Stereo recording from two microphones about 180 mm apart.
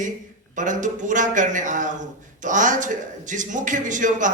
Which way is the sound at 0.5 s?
45° right (ahead or behind).